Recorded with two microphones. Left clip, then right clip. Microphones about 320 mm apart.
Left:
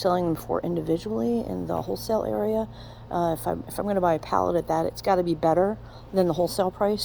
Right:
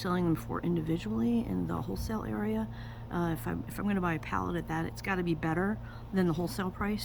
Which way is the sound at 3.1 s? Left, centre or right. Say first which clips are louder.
Left 10 dB; centre.